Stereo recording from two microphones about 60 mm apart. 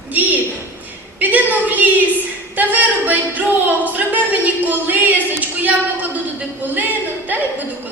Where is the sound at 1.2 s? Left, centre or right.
Right.